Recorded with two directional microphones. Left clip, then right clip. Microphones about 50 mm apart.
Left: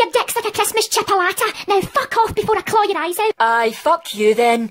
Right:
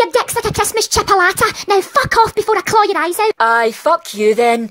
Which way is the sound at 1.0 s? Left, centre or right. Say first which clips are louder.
Right 7 dB; right.